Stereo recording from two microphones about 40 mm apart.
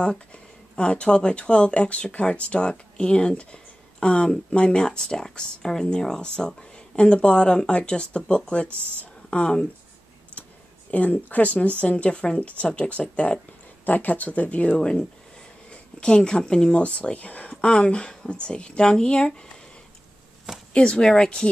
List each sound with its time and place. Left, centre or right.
0.0 s speech: left
10.9 s speech: left
11.8 s speech: left
13.8 s speech: left
14.8 s speech: left
16.8 s speech: left
17.6 s speech: left
20.7 s speech: left